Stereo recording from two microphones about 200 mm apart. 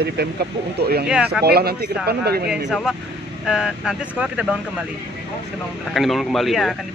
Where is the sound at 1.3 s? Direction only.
55° right (ahead or behind).